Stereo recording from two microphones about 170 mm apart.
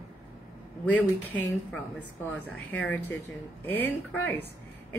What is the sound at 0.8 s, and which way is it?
A woman's voice, 10° left (ahead or behind).